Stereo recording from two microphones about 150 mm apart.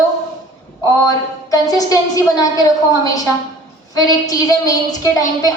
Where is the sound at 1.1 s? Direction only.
25° left (ahead or behind).